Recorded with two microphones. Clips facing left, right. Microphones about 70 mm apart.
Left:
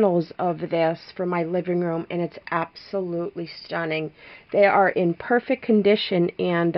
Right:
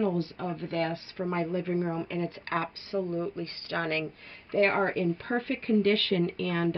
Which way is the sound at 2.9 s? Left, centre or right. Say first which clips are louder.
Left 4 dB; left.